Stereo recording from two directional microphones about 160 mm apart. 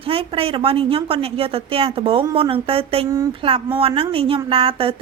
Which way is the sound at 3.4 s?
35° right (ahead or behind).